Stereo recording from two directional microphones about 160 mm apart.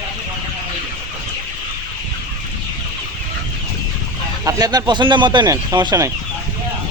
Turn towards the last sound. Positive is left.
turn(degrees=-20)  # may be behind; listen again after turning